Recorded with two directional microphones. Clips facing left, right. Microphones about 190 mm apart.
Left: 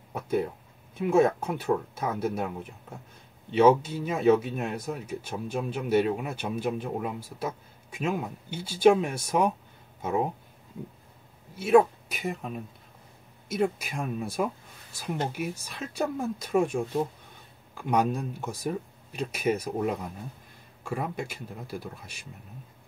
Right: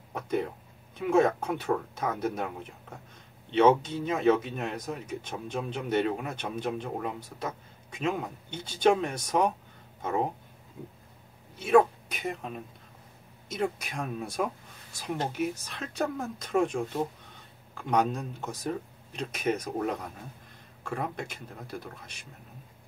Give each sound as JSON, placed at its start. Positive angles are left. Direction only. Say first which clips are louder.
{"t": 0.1, "sound": "a sound", "louder": "left 2 dB", "side_deg": 5}
{"t": 0.9, "sound": "speech", "louder": "left 2 dB", "side_deg": 5}
{"t": 11.5, "sound": "speech", "louder": "left 2 dB", "side_deg": 5}